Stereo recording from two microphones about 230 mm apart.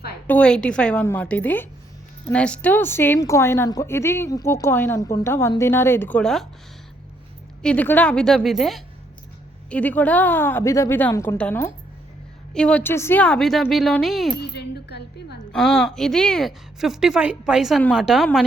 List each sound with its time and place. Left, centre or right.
0.3 s a woman's voice: centre
7.6 s a woman's voice: centre
14.3 s speech: left
15.5 s a woman's voice: centre